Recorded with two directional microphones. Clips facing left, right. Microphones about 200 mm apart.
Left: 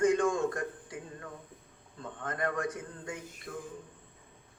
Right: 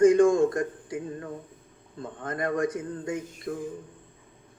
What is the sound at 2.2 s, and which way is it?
Music, 35° right (ahead or behind).